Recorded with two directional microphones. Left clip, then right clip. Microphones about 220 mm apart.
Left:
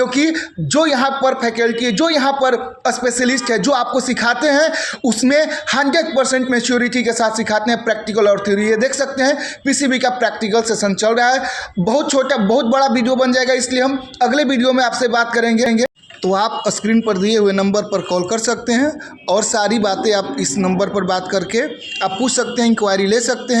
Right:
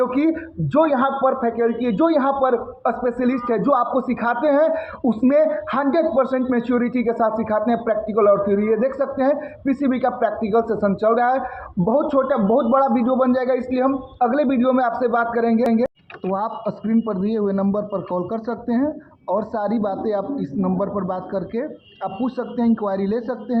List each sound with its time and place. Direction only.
0.0 s a man's voice: 35° left (ahead or behind)